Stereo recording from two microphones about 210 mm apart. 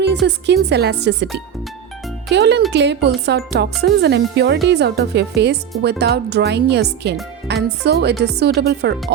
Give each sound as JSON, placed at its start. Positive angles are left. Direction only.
{"t": 0.0, "sound": "speech", "side_deg": -55}
{"t": 2.3, "sound": "speech", "side_deg": -55}